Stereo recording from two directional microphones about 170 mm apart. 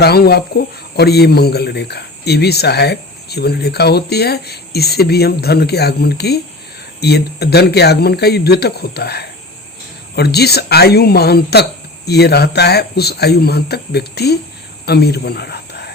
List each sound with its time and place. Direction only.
0.0 s speech: 70° left (ahead or behind)